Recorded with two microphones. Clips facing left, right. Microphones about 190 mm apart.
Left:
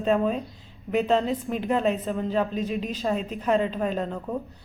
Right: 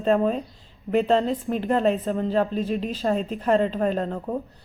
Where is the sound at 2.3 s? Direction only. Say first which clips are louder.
Right 2 dB; 40° right (ahead or behind).